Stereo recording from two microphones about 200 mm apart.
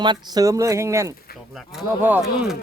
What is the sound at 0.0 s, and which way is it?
Speech, 20° right (ahead or behind).